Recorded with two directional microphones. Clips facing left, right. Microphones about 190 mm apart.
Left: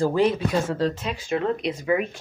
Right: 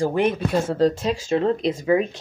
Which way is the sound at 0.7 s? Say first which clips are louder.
Right 5 dB; 35° right (ahead or behind).